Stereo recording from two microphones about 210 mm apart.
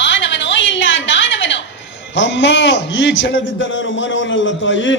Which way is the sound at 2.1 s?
60° left (ahead or behind).